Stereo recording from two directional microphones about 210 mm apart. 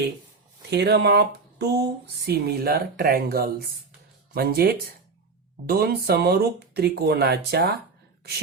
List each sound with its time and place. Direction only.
0.7 s speech: 50° right (ahead or behind)